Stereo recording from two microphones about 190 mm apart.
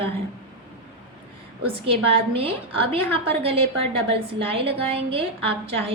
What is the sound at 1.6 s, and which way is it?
A woman's voice, 30° right (ahead or behind).